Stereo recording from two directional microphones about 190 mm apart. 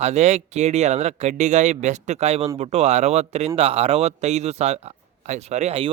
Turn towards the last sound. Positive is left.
turn(degrees=-35)  # may be behind; listen again after turning